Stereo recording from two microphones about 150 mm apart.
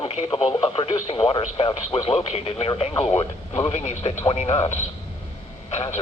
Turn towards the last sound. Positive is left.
turn(degrees=45)  # may be behind; listen again after turning